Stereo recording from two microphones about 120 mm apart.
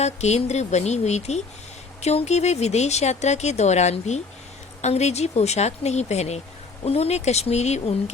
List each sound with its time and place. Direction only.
0.0 s speech: 65° left (ahead or behind)